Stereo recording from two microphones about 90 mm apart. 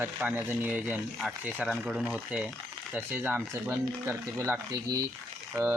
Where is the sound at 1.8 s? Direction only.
Centre (ahead or behind).